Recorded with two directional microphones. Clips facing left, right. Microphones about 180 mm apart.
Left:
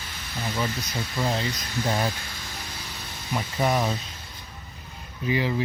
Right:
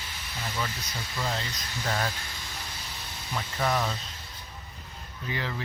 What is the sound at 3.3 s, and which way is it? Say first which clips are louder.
Speech: left 4 dB; 15° left (ahead or behind).